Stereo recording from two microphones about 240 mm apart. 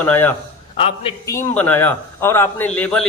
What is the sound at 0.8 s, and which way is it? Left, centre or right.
Speech, left.